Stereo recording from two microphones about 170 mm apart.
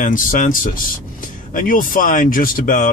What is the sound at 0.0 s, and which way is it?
Speech, 50° left (ahead or behind).